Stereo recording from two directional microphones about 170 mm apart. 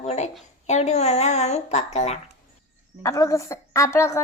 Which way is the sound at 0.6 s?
40° left (ahead or behind).